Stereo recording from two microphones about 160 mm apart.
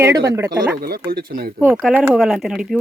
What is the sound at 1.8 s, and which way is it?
Speech, 5° right (ahead or behind).